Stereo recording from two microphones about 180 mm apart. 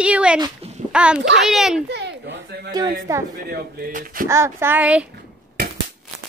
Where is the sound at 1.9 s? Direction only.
75° right (ahead or behind).